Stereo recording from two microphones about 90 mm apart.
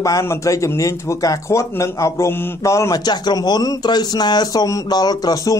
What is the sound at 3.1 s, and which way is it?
Speech, 50° left (ahead or behind).